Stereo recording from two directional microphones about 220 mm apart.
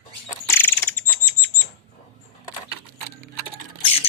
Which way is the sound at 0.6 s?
10° left (ahead or behind).